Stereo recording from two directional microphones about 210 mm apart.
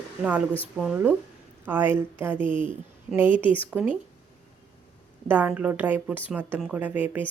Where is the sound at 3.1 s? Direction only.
10° right (ahead or behind).